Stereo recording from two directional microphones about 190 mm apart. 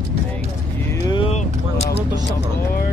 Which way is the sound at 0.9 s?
20° left (ahead or behind).